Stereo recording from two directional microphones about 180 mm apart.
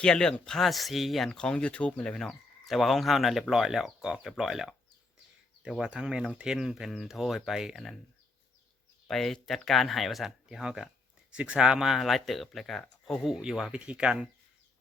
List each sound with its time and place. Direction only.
0.0 s speech: 5° left (ahead or behind)
9.0 s speech: centre (ahead or behind)